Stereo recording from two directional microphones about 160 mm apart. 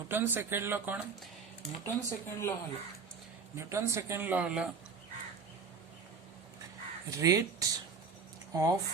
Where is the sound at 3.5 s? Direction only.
15° right (ahead or behind).